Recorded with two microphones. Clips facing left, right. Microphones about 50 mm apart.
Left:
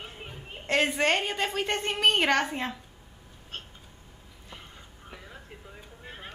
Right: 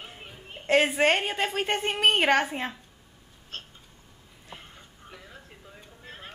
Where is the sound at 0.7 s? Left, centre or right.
Centre.